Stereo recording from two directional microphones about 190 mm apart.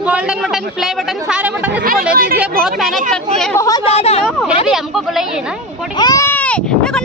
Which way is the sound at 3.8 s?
35° left (ahead or behind).